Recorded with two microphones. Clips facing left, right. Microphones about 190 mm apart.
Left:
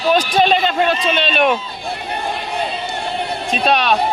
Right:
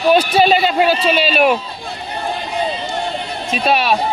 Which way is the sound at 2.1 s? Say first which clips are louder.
Right 2 dB; 65° left (ahead or behind).